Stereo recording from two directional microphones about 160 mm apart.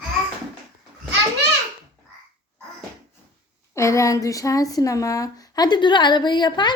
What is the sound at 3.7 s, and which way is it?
Speech, 20° left (ahead or behind).